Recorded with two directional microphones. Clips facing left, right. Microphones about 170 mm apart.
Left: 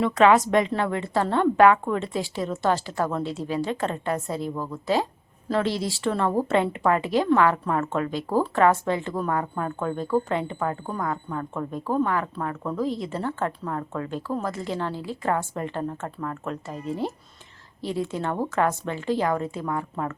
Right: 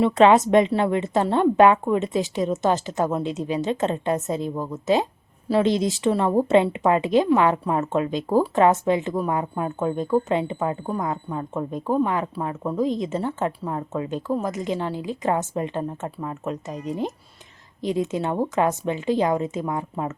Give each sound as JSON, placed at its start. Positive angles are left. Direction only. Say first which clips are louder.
{"t": 0.0, "sound": "a woman's voice", "louder": "right 3 dB", "side_deg": -25}